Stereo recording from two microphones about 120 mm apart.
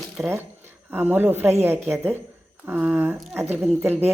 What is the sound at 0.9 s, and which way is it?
Speech, 15° right (ahead or behind).